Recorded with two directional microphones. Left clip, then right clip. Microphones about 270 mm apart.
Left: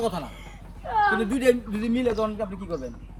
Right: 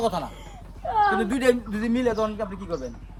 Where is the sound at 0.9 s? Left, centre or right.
Centre.